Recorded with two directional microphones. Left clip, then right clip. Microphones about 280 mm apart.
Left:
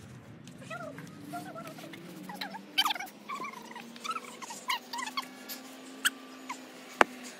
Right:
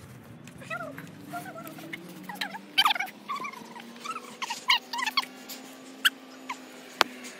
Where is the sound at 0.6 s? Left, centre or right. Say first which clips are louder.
Right 5 dB; centre.